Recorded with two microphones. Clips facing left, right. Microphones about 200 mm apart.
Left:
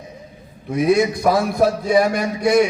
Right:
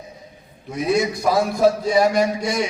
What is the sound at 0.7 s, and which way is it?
A man's voice, 55° left (ahead or behind).